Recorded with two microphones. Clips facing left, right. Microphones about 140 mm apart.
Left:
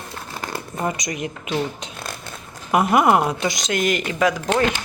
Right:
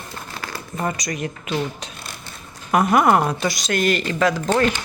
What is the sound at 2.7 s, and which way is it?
A woman's voice, 20° left (ahead or behind).